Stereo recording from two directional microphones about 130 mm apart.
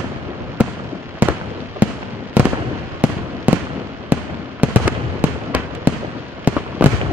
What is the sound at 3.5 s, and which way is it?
Fireworks, 10° right (ahead or behind).